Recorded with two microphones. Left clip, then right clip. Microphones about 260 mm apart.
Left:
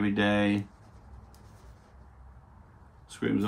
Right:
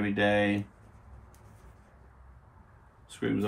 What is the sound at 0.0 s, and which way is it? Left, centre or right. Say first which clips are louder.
Speech: right 1 dB; centre.